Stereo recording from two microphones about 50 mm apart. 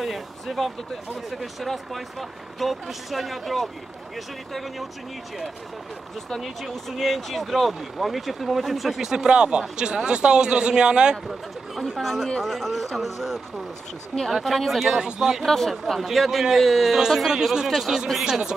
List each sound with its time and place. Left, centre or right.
0.0 s speech: centre
6.4 s speech: centre
11.2 s speech: centre
15.0 s speech: centre
15.4 s speech: centre